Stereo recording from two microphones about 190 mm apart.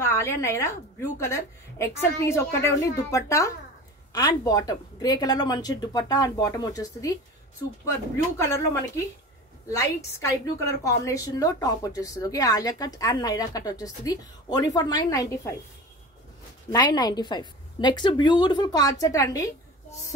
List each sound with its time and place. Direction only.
0.0 s a woman's voice: 15° left (ahead or behind)
9.7 s a woman's voice: 15° left (ahead or behind)
16.7 s a woman's voice: 20° left (ahead or behind)